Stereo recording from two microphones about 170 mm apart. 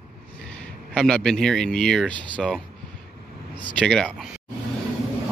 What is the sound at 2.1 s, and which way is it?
Speech, 25° right (ahead or behind).